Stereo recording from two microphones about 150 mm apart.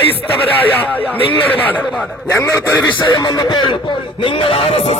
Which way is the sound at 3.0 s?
30° left (ahead or behind).